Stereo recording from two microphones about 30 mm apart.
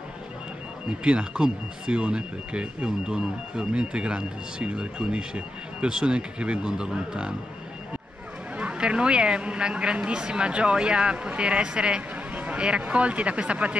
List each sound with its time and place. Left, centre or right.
0.8 s speech: right
6.8 s speech: right
8.7 s speech: right
12.4 s a sound: right
12.8 s speech: right